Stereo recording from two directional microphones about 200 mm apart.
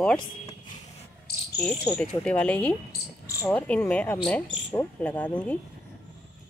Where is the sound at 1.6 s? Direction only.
5° left (ahead or behind).